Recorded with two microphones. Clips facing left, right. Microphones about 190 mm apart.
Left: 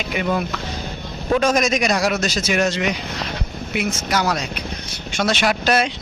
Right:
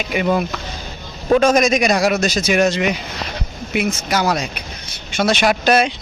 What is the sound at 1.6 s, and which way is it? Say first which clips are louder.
Speech: right 4 dB; 15° right (ahead or behind).